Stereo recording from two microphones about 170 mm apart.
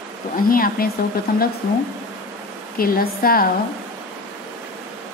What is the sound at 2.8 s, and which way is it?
Speech, 60° left (ahead or behind).